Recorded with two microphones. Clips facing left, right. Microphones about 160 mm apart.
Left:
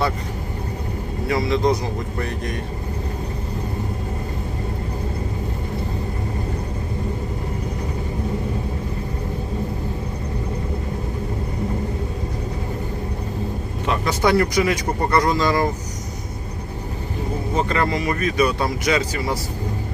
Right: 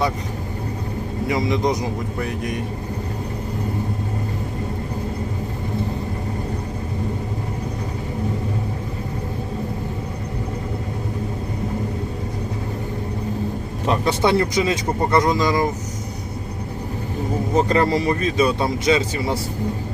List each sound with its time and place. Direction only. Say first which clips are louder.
1.3 s a man's voice: left 1 dB; 15° right (ahead or behind)
13.8 s speech: right 1 dB; 35° right (ahead or behind); by 15.6 s 15° right (ahead or behind)
17.5 s speech: right 4 dB; 35° right (ahead or behind)